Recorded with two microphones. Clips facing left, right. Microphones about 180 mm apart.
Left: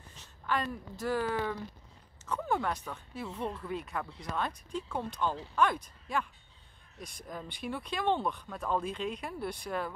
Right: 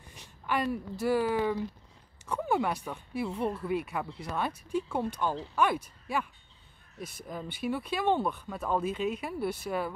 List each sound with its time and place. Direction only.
0.1 s a woman's voice: 10° right (ahead or behind)